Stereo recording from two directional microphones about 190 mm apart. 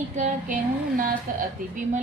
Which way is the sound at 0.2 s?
45° right (ahead or behind).